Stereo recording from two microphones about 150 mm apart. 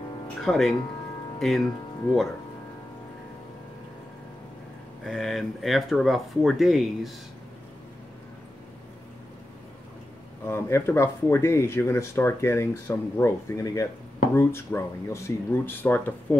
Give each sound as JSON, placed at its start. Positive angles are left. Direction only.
{"t": 0.4, "sound": "speech", "side_deg": 0}
{"t": 5.0, "sound": "speech", "side_deg": 0}
{"t": 10.4, "sound": "speech", "side_deg": 15}